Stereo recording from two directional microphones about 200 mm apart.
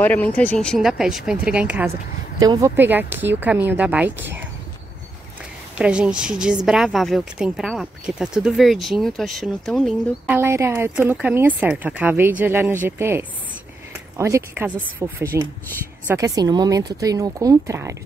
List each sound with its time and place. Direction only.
0.0 s a woman's voice: 10° left (ahead or behind)
2.4 s speech: 15° right (ahead or behind)
5.8 s a woman's voice: 5° right (ahead or behind)
10.2 s speech: 10° right (ahead or behind)